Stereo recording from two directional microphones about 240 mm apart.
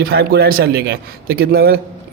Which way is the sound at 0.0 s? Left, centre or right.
Right.